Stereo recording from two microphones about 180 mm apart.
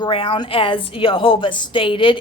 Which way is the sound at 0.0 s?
30° left (ahead or behind).